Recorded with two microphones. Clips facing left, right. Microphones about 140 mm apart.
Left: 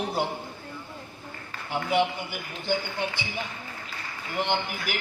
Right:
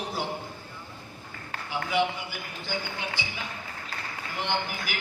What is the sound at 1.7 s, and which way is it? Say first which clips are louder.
Speech: left 2 dB; 55° left (ahead or behind).